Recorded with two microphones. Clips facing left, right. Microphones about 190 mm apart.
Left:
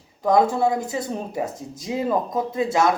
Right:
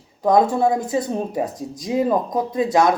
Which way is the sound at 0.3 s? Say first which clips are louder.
Right 2 dB; 20° right (ahead or behind).